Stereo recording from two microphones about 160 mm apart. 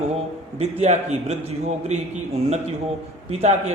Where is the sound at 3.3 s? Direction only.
45° right (ahead or behind).